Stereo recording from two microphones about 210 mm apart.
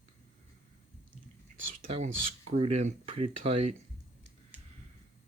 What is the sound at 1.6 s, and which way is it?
Speech, 30° right (ahead or behind).